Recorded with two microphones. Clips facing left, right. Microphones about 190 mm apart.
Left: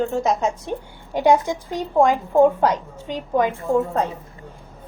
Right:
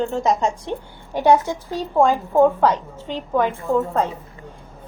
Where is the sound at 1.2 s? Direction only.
15° left (ahead or behind).